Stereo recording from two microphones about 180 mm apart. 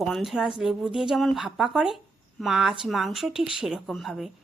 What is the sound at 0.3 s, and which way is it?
A woman's voice, centre (ahead or behind).